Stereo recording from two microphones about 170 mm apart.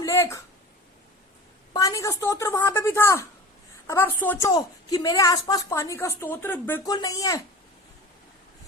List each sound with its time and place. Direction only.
0.0 s speech: 15° left (ahead or behind)
1.7 s a woman's voice: 20° left (ahead or behind)
4.4 s a woman's voice: 20° left (ahead or behind)